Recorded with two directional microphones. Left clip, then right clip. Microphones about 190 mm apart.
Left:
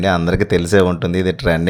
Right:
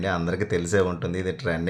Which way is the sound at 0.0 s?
45° left (ahead or behind).